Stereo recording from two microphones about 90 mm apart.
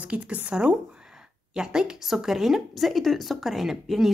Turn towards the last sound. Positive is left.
turn(degrees=-5)  # may be behind; listen again after turning